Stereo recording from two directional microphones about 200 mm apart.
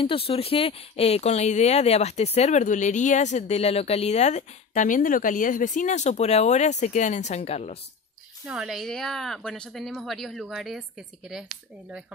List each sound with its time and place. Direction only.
0.0 s speech: 30° left (ahead or behind)
8.5 s speech: 5° right (ahead or behind)